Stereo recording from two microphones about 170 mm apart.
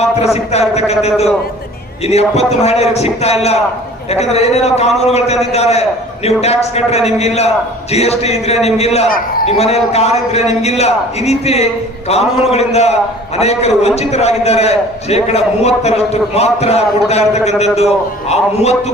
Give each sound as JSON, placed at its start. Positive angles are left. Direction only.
{"t": 0.2, "sound": "a man's voice", "side_deg": 40}